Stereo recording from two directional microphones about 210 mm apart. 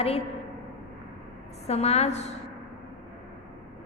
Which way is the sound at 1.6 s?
30° left (ahead or behind).